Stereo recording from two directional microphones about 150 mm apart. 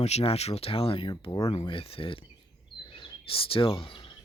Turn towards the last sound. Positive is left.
turn(degrees=35)  # may be behind; listen again after turning